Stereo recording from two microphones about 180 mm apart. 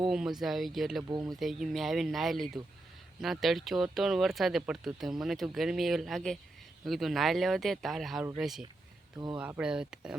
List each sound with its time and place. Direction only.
0.1 s speech: 5° right (ahead or behind)
1.0 s speech: 20° right (ahead or behind)
1.4 s speech: centre (ahead or behind)